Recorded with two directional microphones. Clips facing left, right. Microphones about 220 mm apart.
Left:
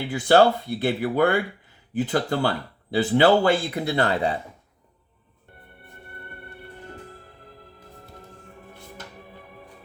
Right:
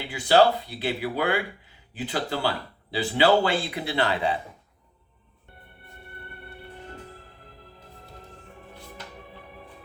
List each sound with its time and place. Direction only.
0.1 s a man's voice: 50° left (ahead or behind)